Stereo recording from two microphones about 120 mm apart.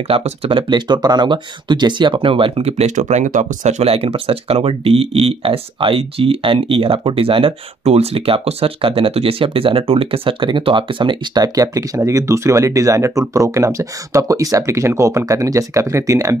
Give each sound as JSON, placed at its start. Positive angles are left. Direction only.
{"t": 0.1, "sound": "speech", "side_deg": -50}